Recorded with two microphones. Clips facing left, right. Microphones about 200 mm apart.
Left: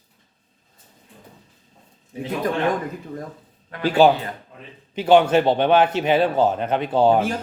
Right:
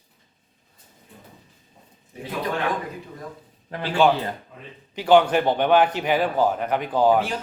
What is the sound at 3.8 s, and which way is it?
Speech, 35° left (ahead or behind).